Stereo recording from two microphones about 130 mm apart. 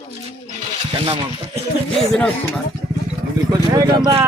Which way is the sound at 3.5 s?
30° right (ahead or behind).